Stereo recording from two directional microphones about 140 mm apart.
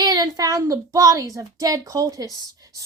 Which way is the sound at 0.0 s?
30° right (ahead or behind).